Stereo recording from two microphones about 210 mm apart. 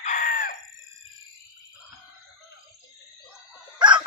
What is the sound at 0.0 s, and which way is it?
Chicken, 35° left (ahead or behind).